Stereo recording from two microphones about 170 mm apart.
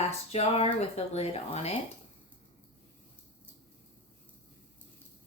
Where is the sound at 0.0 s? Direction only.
35° left (ahead or behind).